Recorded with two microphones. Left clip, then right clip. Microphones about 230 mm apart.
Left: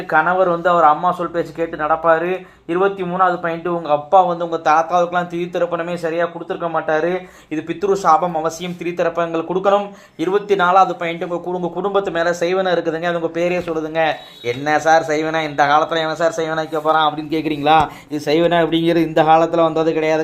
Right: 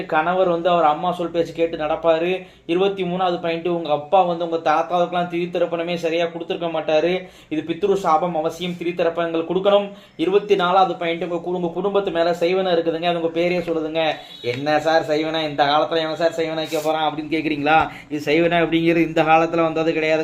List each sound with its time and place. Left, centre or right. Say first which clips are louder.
0.1 s a man's voice: left 4 dB; left